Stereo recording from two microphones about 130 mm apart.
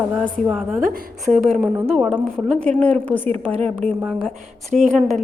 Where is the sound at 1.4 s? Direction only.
Centre (ahead or behind).